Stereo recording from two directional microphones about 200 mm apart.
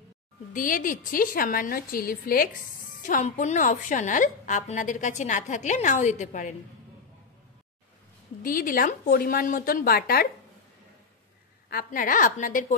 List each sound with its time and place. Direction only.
0.5 s a woman's voice: 40° left (ahead or behind)
8.4 s a woman's voice: 45° left (ahead or behind)
11.7 s a woman's voice: 45° left (ahead or behind)